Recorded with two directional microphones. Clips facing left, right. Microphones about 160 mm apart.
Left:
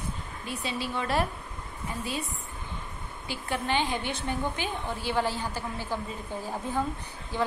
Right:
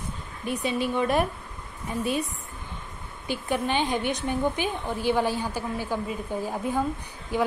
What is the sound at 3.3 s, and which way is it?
A woman's voice, 15° right (ahead or behind).